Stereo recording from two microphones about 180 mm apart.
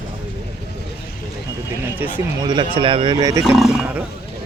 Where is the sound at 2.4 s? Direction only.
25° right (ahead or behind).